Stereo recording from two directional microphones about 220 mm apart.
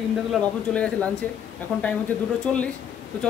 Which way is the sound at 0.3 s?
5° left (ahead or behind).